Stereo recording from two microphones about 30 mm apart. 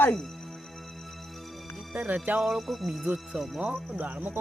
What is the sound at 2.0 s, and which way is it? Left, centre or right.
Music, right.